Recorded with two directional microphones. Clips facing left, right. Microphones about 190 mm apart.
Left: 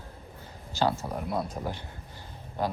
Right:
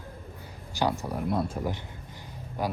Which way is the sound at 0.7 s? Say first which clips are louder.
Left 1 dB; 15° right (ahead or behind).